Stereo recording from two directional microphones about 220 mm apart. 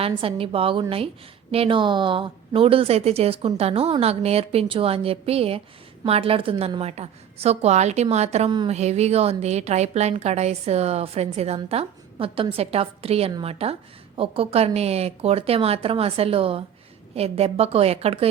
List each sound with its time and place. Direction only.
0.0 s a woman's voice: 25° right (ahead or behind)